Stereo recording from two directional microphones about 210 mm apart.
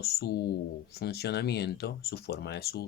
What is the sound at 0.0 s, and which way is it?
Speech, 50° left (ahead or behind).